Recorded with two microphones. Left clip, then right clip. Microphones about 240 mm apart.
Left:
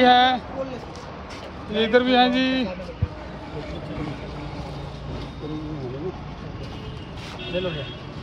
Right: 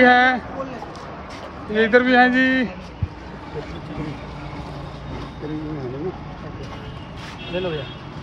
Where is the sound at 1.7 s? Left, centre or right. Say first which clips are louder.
Right 3 dB; right.